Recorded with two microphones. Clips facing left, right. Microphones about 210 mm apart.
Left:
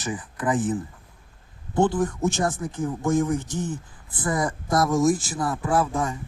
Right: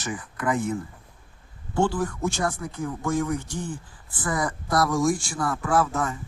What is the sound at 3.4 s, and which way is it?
Speech, 10° right (ahead or behind).